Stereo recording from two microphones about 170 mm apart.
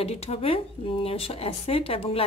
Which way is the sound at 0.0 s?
35° left (ahead or behind).